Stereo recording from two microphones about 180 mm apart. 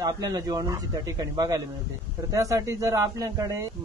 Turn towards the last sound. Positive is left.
turn(degrees=-20)  # may be behind; listen again after turning